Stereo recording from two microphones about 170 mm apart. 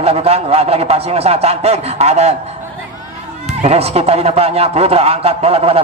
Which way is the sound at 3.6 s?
35° right (ahead or behind).